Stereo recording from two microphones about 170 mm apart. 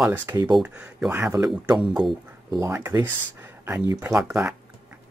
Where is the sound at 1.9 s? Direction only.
Centre (ahead or behind).